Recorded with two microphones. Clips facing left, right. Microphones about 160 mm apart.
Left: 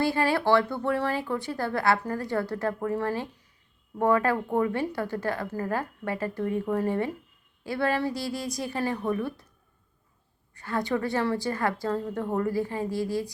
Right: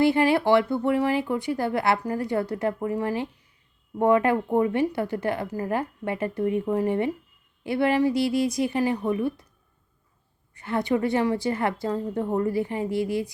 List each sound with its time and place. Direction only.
0.0 s speech: 15° right (ahead or behind)
10.5 s speech: 20° right (ahead or behind)